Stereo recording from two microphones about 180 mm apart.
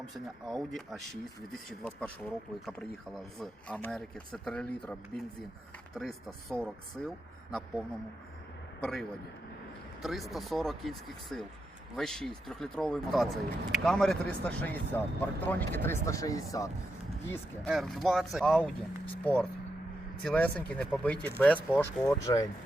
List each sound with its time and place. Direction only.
0.4 s speech: centre (ahead or behind)
8.8 s speech: centre (ahead or behind); by 16.7 s 20° left (ahead or behind)
17.7 s speech: centre (ahead or behind); by 22.4 s 15° left (ahead or behind)